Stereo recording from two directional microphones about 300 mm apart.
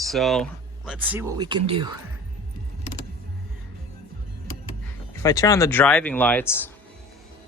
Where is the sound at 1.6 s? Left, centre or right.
Centre.